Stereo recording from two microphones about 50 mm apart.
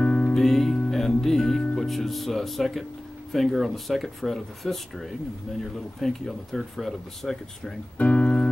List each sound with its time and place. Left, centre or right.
0.0 s music: left
0.3 s music: centre
1.8 s speech: centre
8.0 s speech: left